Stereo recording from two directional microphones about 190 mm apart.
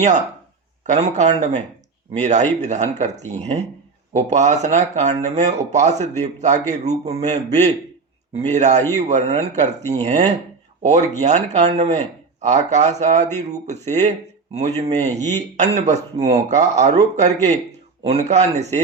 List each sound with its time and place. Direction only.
0.9 s speech: 35° right (ahead or behind)